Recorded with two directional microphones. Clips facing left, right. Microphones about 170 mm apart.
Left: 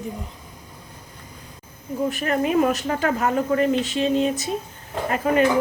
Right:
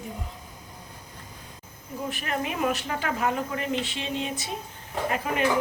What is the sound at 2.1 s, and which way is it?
A woman's voice, 45° left (ahead or behind).